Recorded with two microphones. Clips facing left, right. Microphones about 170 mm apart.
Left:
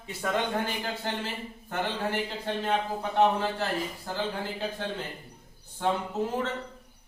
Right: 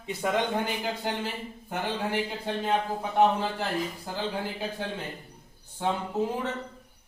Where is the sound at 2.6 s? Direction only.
10° right (ahead or behind).